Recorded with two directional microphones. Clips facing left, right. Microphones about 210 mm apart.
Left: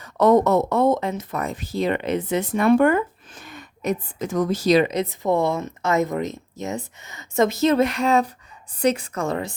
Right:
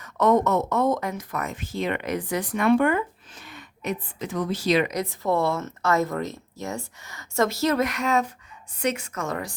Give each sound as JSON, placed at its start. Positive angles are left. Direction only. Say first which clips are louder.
{"t": 0.0, "sound": "speech", "louder": "left 4 dB", "side_deg": 35}
{"t": 2.6, "sound": "speech", "louder": "left 3 dB", "side_deg": 45}
{"t": 4.9, "sound": "speech", "louder": "left 3 dB", "side_deg": 20}